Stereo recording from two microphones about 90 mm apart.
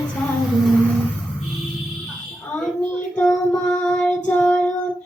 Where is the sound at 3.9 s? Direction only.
15° left (ahead or behind).